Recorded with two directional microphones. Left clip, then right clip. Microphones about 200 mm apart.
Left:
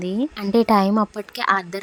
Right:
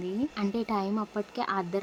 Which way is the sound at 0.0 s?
35° left (ahead or behind).